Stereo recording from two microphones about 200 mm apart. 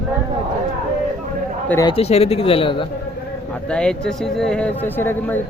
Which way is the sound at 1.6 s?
10° left (ahead or behind).